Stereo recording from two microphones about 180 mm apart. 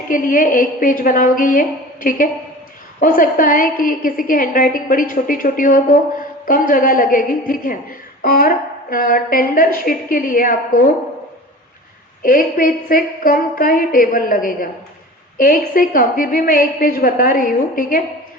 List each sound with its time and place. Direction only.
0.1 s a woman's voice: 50° left (ahead or behind)
12.2 s a woman's voice: 50° left (ahead or behind)